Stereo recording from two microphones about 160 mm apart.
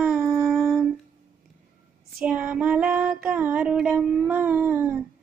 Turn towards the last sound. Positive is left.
turn(degrees=-10)  # may be behind; listen again after turning